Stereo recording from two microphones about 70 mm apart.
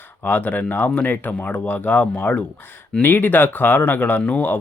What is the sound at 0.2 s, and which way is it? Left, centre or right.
Speech, left.